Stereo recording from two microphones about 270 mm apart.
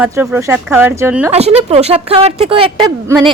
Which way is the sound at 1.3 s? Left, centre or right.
Right.